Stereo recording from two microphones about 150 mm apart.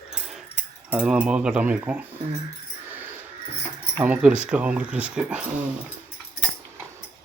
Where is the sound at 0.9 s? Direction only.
5° right (ahead or behind).